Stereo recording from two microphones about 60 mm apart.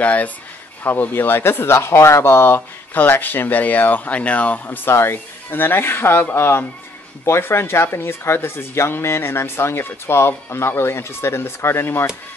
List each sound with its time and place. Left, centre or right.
0.0 s speech: left
3.0 s speech: left
4.9 s speech: left